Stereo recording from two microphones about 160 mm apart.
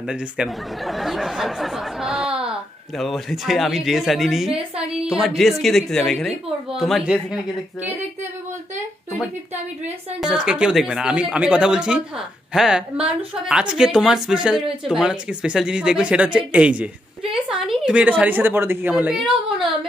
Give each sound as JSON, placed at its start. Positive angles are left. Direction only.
{"t": 0.0, "sound": "a woman's voice", "side_deg": -5}
{"t": 10.2, "sound": "a woman's voice", "side_deg": -5}